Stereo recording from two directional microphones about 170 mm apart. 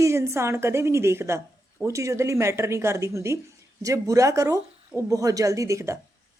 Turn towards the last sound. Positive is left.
turn(degrees=-15)  # may be behind; listen again after turning